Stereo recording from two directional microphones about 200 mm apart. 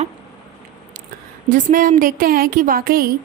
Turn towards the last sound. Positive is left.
turn(degrees=-50)  # may be behind; listen again after turning